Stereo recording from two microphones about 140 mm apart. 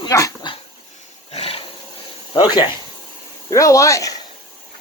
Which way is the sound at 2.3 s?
30° left (ahead or behind).